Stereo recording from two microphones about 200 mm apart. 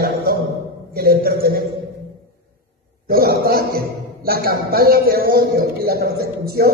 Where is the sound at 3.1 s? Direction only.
50° right (ahead or behind).